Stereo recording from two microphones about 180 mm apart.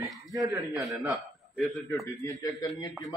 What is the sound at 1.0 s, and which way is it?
A man's voice, centre (ahead or behind).